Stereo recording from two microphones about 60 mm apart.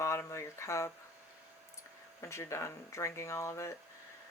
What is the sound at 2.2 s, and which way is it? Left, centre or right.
Speech, left.